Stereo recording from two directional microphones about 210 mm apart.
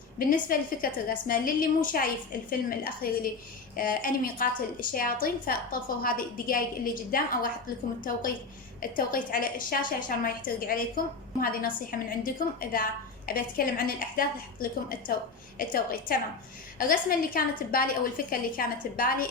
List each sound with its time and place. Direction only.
0.3 s a woman's voice: 40° left (ahead or behind)
8.8 s a woman's voice: 40° left (ahead or behind)